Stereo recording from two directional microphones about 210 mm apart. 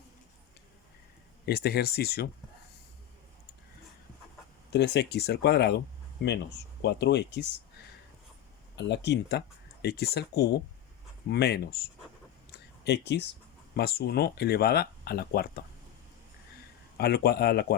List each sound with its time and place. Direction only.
1.5 s speech: 50° left (ahead or behind)
4.7 s speech: 55° left (ahead or behind)
8.7 s speech: 55° left (ahead or behind)
12.5 s a sound: 55° left (ahead or behind)
13.7 s speech: 50° left (ahead or behind)
17.0 s speech: 50° left (ahead or behind)